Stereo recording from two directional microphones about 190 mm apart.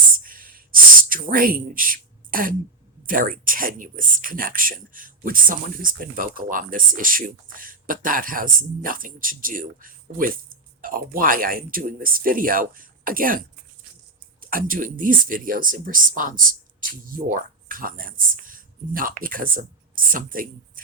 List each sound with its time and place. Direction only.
0.2 s a sound: 45° right (ahead or behind)
3.1 s speech: 45° right (ahead or behind)
14.5 s speech: 45° right (ahead or behind)